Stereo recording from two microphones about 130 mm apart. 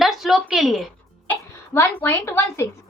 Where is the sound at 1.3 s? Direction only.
20° left (ahead or behind).